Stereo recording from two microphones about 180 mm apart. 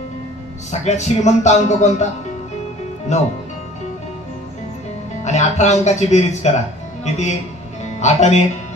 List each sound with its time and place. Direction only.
0.7 s speech: 40° left (ahead or behind)
3.1 s speech: 40° left (ahead or behind)
5.2 s speech: 40° left (ahead or behind)
7.8 s speech: 40° left (ahead or behind)